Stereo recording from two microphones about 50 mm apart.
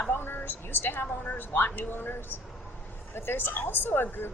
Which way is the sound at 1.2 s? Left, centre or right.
Left.